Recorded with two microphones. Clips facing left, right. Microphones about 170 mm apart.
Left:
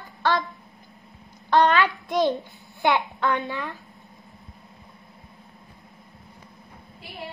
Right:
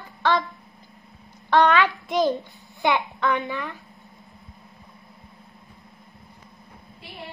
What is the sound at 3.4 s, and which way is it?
Speech, 20° left (ahead or behind).